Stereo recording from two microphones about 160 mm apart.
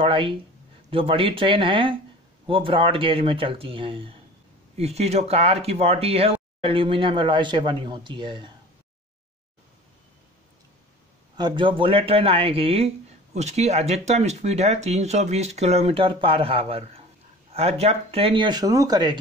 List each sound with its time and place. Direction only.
0.0 s speech: 35° right (ahead or behind)
11.3 s speech: 30° right (ahead or behind)